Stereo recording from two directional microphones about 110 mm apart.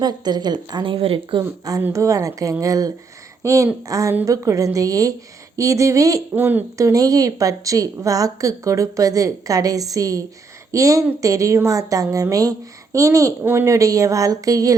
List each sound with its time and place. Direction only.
0.0 s a woman's voice: 40° right (ahead or behind); by 1.4 s 55° right (ahead or behind)
1.9 s a woman's voice: 30° right (ahead or behind)
6.3 s speech: 20° right (ahead or behind)
6.7 s a woman's voice: 30° right (ahead or behind)